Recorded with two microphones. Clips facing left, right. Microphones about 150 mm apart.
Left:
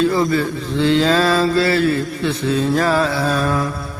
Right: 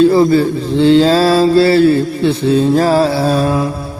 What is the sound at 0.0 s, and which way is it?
Mantra, 30° right (ahead or behind).